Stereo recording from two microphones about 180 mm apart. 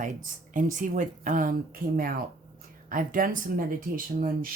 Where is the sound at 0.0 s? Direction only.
45° right (ahead or behind).